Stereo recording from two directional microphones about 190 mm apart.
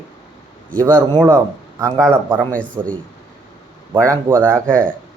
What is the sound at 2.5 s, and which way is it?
Speech, 5° left (ahead or behind).